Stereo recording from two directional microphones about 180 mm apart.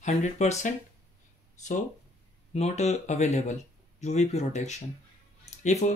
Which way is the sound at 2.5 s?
35° left (ahead or behind).